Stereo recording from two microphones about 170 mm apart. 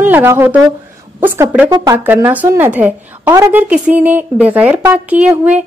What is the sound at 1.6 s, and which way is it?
Speech, 20° right (ahead or behind).